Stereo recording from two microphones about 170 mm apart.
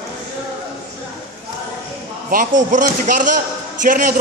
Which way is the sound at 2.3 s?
50° right (ahead or behind).